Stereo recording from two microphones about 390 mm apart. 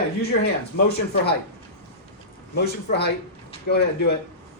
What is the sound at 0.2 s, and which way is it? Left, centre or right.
Speech, left.